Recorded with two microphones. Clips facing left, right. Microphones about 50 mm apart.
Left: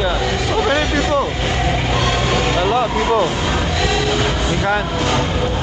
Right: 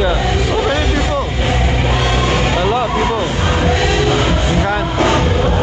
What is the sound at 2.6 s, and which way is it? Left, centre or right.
Vehicle, centre.